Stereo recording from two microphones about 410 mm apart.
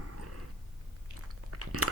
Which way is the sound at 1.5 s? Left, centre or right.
Right.